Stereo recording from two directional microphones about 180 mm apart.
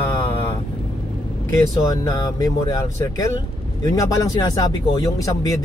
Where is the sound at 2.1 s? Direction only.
20° left (ahead or behind).